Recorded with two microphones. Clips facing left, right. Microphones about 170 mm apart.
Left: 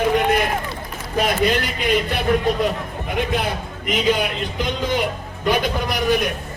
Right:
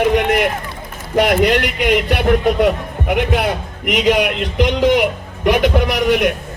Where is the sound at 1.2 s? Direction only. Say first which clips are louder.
Right 6 dB; 75° right (ahead or behind).